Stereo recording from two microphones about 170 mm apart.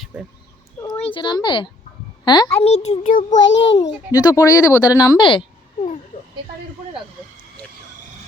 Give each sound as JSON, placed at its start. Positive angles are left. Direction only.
{"t": 0.9, "sound": "speech", "side_deg": 35}
{"t": 2.6, "sound": "a child's voice", "side_deg": 40}
{"t": 3.4, "sound": "a child's voice", "side_deg": 90}
{"t": 3.8, "sound": "speech", "side_deg": 25}